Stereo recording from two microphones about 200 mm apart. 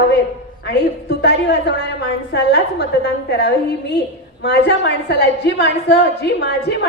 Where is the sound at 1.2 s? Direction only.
55° left (ahead or behind).